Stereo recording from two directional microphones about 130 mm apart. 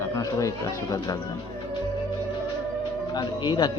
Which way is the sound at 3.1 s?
35° left (ahead or behind).